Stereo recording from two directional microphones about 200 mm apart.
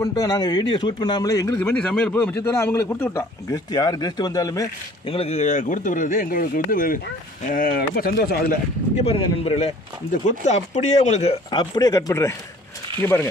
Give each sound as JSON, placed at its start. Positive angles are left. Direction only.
{"t": 0.0, "sound": "a man's voice", "side_deg": 20}
{"t": 5.1, "sound": "speech", "side_deg": 30}
{"t": 9.0, "sound": "a man's voice", "side_deg": 30}